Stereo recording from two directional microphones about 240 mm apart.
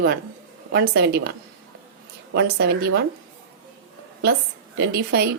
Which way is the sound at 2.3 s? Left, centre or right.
Right.